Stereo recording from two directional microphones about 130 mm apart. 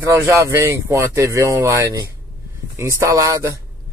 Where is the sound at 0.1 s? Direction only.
20° right (ahead or behind).